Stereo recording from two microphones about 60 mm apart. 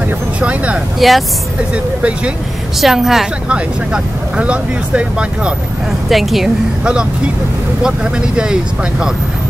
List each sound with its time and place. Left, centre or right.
0.4 s speech: right
0.9 s a woman's voice: centre
1.7 s speech: centre
2.8 s a woman's voice: centre
3.4 s speech: centre
5.9 s a woman's voice: centre
6.8 s speech: centre